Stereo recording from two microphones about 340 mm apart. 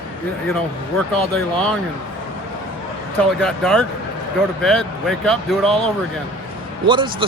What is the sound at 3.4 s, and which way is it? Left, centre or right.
Speech, centre.